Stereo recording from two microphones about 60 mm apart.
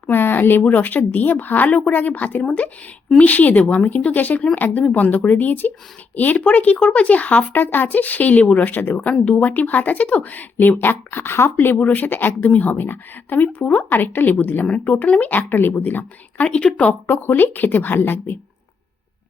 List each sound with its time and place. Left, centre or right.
0.1 s speech: left
9.2 s speech: left
16.5 s speech: centre
17.1 s speech: left